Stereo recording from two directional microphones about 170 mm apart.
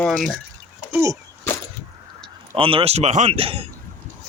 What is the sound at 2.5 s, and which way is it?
Speech, 30° right (ahead or behind).